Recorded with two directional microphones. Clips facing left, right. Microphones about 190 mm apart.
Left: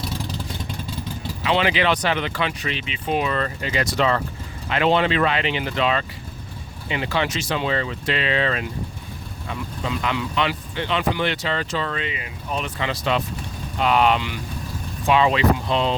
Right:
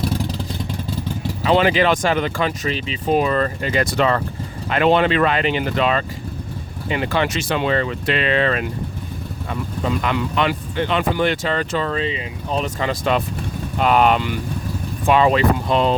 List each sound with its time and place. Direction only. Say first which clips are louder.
1.4 s speech: right 5 dB; 40° right (ahead or behind)
12.6 s speech: right 3 dB; 45° right (ahead or behind)